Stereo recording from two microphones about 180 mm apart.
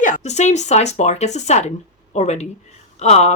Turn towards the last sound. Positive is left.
turn(degrees=40)  # may be behind; listen again after turning